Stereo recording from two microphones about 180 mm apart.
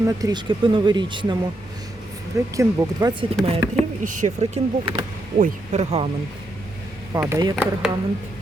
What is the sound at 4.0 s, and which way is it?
Speech, 45° right (ahead or behind).